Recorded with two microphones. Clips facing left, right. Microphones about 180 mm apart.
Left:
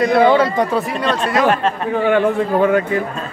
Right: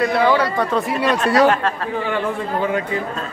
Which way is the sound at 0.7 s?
Centre (ahead or behind).